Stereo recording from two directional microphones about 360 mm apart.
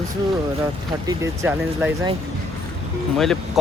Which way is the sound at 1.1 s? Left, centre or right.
Centre.